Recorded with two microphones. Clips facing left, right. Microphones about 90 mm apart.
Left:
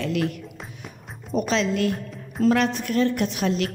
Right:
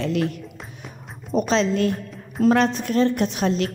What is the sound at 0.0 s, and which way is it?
Speech, 25° right (ahead or behind).